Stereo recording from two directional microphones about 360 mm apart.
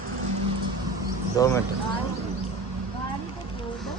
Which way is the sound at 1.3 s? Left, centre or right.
Centre.